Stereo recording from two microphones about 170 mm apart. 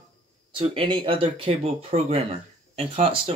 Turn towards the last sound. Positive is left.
turn(degrees=-35)  # may be behind; listen again after turning